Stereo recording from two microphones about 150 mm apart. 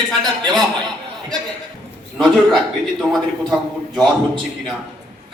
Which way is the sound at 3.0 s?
Centre (ahead or behind).